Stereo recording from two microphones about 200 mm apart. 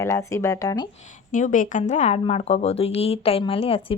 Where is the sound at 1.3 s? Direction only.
40° left (ahead or behind).